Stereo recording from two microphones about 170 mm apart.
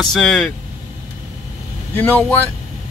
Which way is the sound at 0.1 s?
5° left (ahead or behind).